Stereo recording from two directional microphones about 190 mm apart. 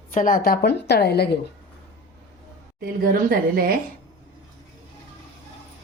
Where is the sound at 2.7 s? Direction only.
50° right (ahead or behind).